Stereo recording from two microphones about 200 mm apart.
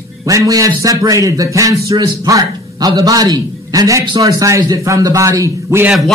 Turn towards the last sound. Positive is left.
turn(degrees=-10)  # may be behind; listen again after turning